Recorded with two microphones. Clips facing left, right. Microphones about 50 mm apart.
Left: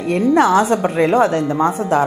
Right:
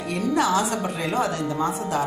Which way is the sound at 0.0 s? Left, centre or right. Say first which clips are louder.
Left 9 dB; left.